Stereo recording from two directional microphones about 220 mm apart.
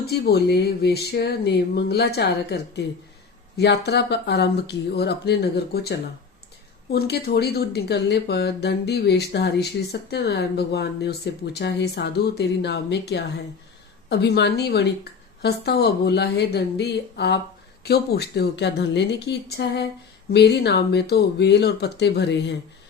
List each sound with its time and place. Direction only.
0.0 s speech: 45° left (ahead or behind)
6.9 s speech: 45° left (ahead or behind)